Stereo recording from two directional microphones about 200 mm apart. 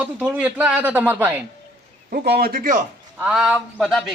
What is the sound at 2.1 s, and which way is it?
Speech, 50° right (ahead or behind).